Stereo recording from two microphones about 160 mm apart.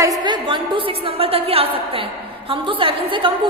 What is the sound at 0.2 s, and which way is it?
A woman's voice, 30° right (ahead or behind).